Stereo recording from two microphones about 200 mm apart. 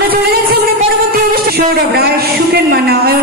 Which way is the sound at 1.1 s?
50° right (ahead or behind).